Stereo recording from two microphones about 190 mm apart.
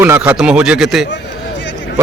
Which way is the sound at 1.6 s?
75° left (ahead or behind).